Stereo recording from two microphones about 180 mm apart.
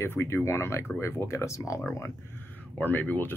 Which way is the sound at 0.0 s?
15° left (ahead or behind).